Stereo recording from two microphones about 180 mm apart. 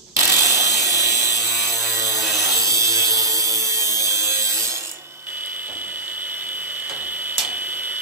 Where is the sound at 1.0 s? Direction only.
15° right (ahead or behind).